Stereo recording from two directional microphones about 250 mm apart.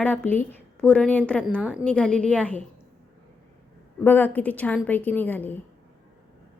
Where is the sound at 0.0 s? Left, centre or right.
Centre.